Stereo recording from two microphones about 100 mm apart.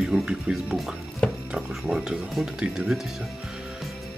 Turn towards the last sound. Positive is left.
turn(degrees=-5)  # may be behind; listen again after turning